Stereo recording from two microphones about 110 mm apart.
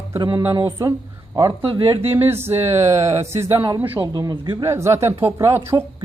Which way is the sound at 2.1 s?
20° right (ahead or behind).